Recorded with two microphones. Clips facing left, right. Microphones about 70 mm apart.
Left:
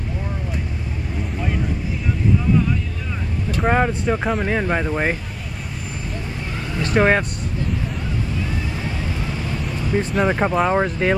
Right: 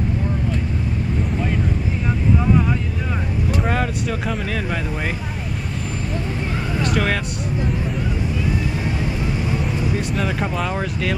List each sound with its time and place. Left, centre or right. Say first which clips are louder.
3.6 s speech: left 4 dB; left
6.9 s speech: left 6 dB; left
10.2 s speech: left 5 dB; left